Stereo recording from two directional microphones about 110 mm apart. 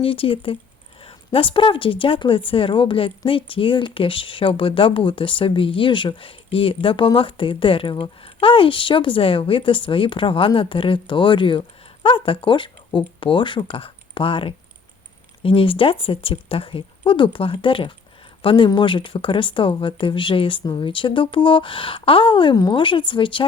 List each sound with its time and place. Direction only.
0.0 s speech: 55° left (ahead or behind)